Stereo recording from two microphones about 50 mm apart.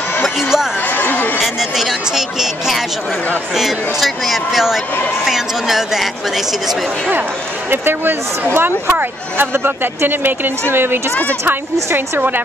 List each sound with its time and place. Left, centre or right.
0.4 s a sound: centre
0.9 s chatter: left
1.4 s speech: centre
7.7 s a woman's voice: right